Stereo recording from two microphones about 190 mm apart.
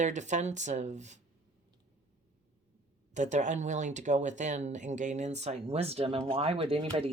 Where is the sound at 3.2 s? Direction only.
40° right (ahead or behind).